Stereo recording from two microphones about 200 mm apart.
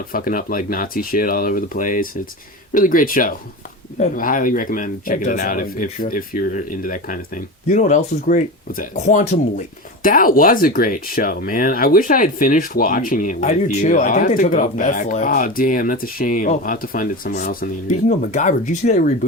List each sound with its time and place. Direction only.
0.1 s speech: 45° left (ahead or behind)